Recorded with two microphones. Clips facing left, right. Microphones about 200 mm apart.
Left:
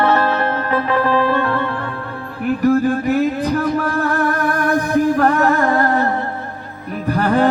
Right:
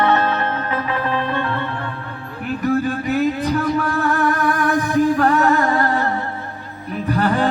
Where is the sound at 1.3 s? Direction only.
40° left (ahead or behind).